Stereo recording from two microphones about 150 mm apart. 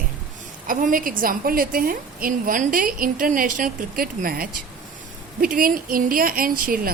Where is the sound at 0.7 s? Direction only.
65° right (ahead or behind).